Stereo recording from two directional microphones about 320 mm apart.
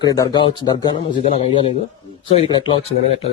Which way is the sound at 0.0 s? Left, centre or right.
Centre.